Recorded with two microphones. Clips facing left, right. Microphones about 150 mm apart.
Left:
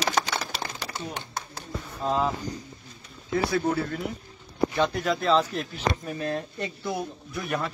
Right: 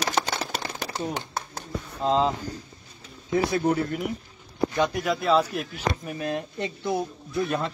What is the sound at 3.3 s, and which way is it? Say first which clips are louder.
Speech: right 2 dB; 15° right (ahead or behind).